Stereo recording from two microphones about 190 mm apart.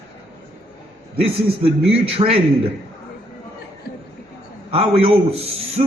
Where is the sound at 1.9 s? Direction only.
30° right (ahead or behind).